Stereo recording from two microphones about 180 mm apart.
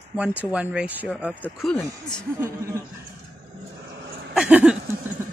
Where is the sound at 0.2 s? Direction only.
10° right (ahead or behind).